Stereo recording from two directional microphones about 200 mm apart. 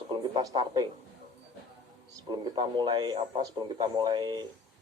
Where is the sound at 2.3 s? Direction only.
20° right (ahead or behind).